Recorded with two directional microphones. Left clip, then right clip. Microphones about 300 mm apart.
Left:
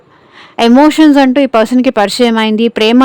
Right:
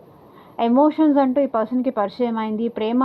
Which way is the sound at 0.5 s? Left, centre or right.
Left.